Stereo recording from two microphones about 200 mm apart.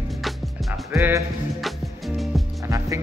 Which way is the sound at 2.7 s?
15° right (ahead or behind).